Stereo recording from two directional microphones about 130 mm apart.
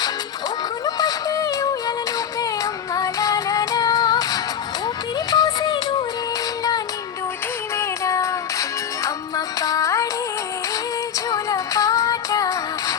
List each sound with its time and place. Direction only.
0.9 s music: 30° left (ahead or behind)
2.9 s music: 25° left (ahead or behind)
7.8 s child singing: 25° left (ahead or behind)
9.0 s music: 30° left (ahead or behind)
11.3 s music: 25° left (ahead or behind)